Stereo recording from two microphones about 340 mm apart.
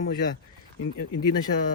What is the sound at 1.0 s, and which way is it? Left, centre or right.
Speech, left.